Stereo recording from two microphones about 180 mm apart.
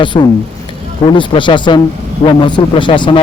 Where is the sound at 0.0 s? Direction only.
25° left (ahead or behind).